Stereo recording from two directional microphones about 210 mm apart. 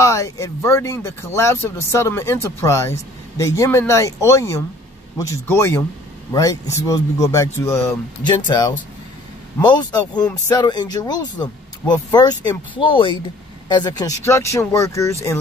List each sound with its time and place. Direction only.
0.0 s speech: 15° left (ahead or behind)